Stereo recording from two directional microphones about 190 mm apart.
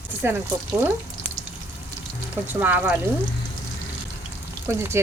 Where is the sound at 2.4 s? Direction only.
10° right (ahead or behind).